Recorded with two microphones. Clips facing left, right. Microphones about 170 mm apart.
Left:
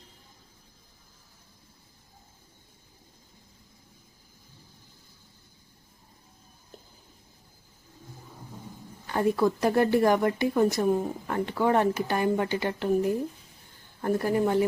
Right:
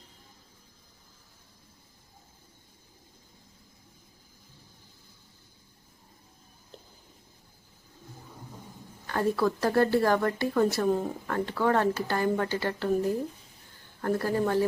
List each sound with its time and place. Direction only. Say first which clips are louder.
9.0 s speech: left 2 dB; 15° left (ahead or behind)